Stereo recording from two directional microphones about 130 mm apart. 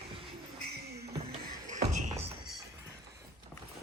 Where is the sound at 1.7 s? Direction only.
70° right (ahead or behind).